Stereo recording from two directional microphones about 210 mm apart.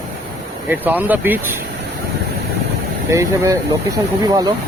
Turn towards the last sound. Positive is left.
turn(degrees=-20)  # may be behind; listen again after turning